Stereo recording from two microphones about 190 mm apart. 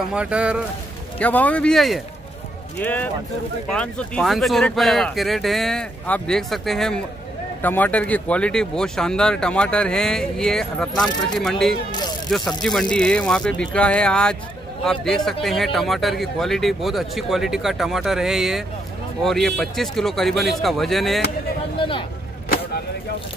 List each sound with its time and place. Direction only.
0.1 s speech: 5° right (ahead or behind)
1.2 s speech: 10° left (ahead or behind)
21.7 s a sound: 25° left (ahead or behind)